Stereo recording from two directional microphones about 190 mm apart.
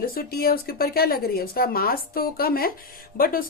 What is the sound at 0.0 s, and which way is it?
Speech, 50° left (ahead or behind).